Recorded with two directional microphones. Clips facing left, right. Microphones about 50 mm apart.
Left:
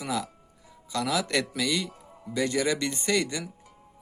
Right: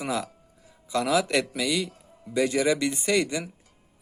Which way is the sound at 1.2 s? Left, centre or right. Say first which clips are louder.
Right 2 dB; centre.